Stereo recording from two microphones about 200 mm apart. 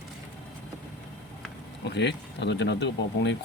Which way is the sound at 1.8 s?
60° left (ahead or behind).